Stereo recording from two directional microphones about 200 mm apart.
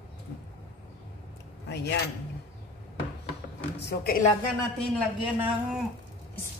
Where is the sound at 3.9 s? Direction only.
50° left (ahead or behind).